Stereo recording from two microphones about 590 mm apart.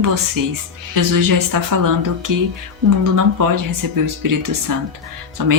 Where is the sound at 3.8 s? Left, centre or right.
Right.